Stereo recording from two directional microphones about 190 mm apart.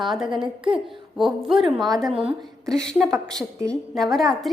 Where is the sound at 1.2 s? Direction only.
Centre (ahead or behind).